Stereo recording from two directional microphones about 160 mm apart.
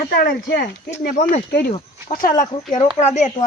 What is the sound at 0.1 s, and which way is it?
Speech, 70° left (ahead or behind).